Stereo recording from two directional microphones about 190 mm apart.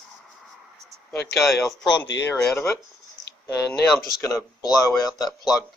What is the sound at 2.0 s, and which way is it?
Speech, 70° left (ahead or behind).